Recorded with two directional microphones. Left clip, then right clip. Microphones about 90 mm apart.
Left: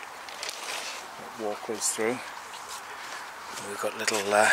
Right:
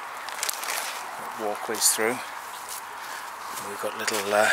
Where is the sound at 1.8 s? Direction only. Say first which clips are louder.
Right 6 dB; 20° right (ahead or behind).